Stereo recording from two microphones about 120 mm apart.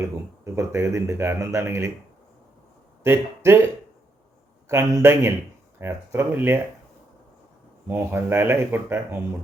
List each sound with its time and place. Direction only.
0.0 s speech: 25° right (ahead or behind)
3.0 s speech: 20° right (ahead or behind)
4.7 s speech: 25° right (ahead or behind)
7.9 s speech: 15° right (ahead or behind)